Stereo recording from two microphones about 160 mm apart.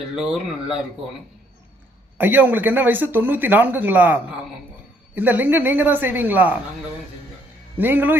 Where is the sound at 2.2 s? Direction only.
10° right (ahead or behind).